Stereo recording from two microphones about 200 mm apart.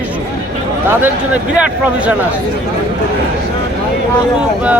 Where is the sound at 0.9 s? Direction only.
10° right (ahead or behind).